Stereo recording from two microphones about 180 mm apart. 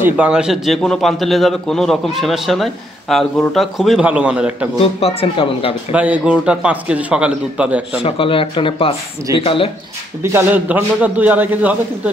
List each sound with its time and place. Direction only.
0.0 s a man's voice: 5° right (ahead or behind)
5.0 s speech: 30° left (ahead or behind)
5.9 s a man's voice: 10° right (ahead or behind)
8.0 s speech: 30° left (ahead or behind)
10.2 s a man's voice: 10° right (ahead or behind)